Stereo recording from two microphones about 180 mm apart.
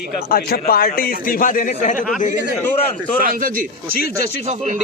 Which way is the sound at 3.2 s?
55° right (ahead or behind).